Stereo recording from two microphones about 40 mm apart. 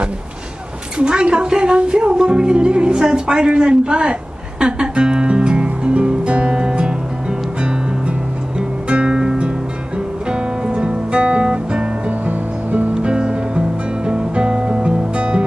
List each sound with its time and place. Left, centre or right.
0.9 s speech: right
8.5 s music: right
10.3 s guitar: right
12.9 s music: right